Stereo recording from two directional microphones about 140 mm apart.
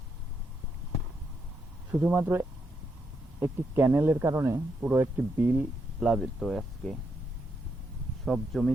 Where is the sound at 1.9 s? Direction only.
15° right (ahead or behind).